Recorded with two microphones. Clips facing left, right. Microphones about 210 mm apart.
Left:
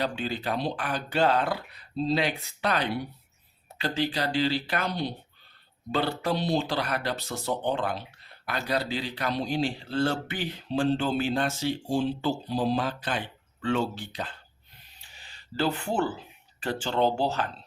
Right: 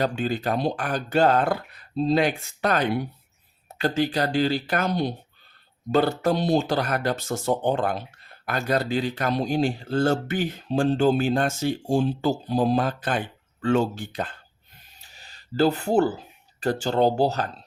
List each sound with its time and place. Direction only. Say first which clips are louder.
0.0 s speech: right 5 dB; 45° right (ahead or behind)
15.0 s speech: right 1 dB; 40° right (ahead or behind)